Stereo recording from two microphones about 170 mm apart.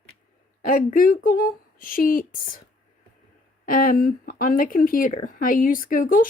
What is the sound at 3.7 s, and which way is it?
A woman's voice, 55° left (ahead or behind).